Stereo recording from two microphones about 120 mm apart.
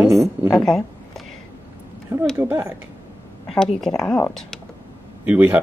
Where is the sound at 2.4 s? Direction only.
15° right (ahead or behind).